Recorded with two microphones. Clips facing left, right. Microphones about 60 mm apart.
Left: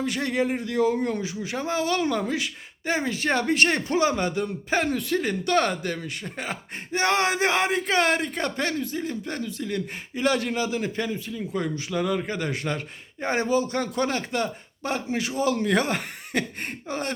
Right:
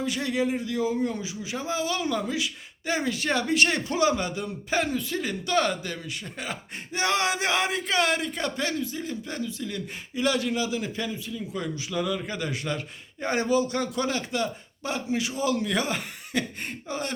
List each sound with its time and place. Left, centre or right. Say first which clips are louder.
0.0 s speech: left 1 dB; left